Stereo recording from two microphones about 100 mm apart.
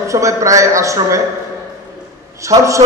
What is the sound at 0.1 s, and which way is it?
A man's voice, 30° right (ahead or behind).